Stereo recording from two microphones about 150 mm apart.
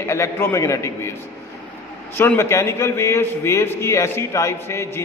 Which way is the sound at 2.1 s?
15° left (ahead or behind).